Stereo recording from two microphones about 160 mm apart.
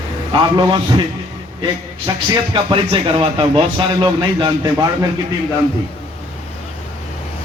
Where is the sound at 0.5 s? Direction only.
30° right (ahead or behind).